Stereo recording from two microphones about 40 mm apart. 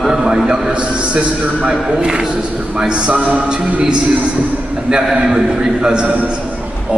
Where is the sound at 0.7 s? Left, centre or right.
Right.